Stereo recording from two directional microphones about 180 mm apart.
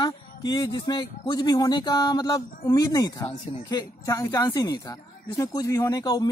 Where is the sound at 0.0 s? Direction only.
25° left (ahead or behind).